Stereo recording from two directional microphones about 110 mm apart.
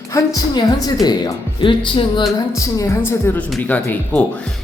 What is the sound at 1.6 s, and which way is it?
Speech, 50° left (ahead or behind).